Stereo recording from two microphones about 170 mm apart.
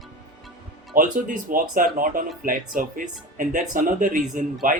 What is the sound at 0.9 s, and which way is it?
Speech, 50° right (ahead or behind).